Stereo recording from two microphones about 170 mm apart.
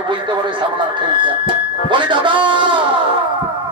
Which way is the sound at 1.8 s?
30° right (ahead or behind).